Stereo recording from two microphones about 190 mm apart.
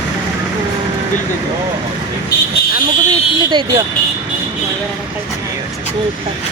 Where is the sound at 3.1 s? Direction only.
25° right (ahead or behind).